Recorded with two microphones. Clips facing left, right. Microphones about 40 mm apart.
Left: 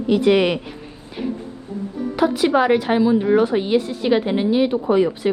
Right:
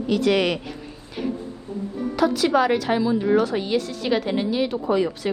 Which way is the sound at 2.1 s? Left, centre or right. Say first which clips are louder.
Left 2 dB; left.